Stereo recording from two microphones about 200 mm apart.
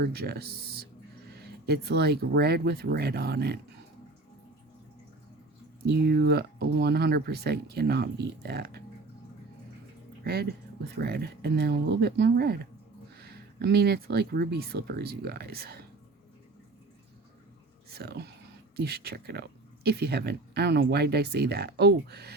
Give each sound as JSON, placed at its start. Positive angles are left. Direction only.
{"t": 0.0, "sound": "speech", "side_deg": -50}
{"t": 5.8, "sound": "speech", "side_deg": -55}
{"t": 10.2, "sound": "speech", "side_deg": -50}
{"t": 17.8, "sound": "speech", "side_deg": -50}